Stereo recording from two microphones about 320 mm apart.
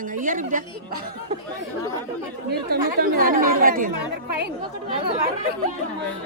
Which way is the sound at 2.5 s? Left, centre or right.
Right.